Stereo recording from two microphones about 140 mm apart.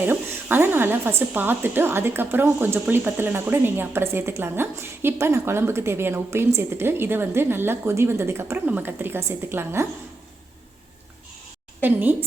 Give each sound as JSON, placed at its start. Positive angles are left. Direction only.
{"t": 0.0, "sound": "speech", "side_deg": -15}
{"t": 11.8, "sound": "speech", "side_deg": -15}